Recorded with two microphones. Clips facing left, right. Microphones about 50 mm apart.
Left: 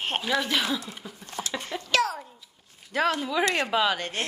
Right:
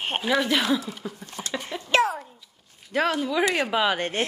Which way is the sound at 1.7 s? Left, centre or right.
Right.